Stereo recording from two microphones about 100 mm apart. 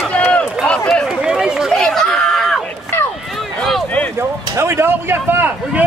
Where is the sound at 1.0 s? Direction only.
5° right (ahead or behind).